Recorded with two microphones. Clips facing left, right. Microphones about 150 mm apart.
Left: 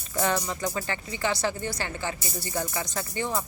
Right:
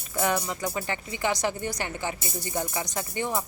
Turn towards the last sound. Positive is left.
turn(degrees=-15)  # may be behind; listen again after turning